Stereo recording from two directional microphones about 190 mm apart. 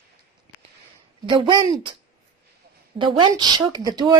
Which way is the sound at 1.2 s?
25° right (ahead or behind).